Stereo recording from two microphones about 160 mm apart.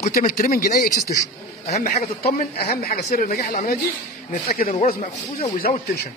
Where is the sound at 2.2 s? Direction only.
75° left (ahead or behind).